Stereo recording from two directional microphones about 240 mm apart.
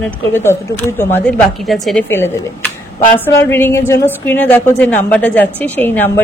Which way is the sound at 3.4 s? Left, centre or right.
Centre.